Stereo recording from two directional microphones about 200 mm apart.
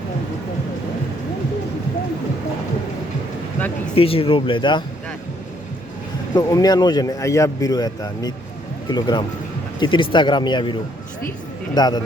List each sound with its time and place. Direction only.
3.9 s speech: 30° left (ahead or behind)
6.3 s speech: 20° left (ahead or behind)